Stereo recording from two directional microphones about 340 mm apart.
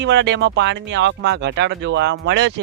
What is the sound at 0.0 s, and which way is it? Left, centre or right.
Speech, right.